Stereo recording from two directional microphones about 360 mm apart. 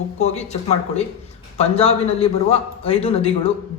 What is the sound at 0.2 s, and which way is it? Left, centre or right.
A man's voice, centre.